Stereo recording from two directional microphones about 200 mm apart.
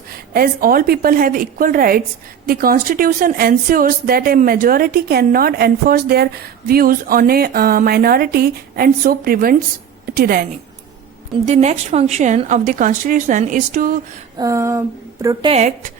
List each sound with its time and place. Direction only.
0.1 s a woman's voice: 50° right (ahead or behind)
11.4 s a woman's voice: 35° right (ahead or behind)
14.3 s speech: 15° right (ahead or behind)
15.4 s a woman's voice: 35° right (ahead or behind)